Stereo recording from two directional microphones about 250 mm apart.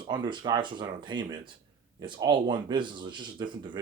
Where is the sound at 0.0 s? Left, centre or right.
Centre.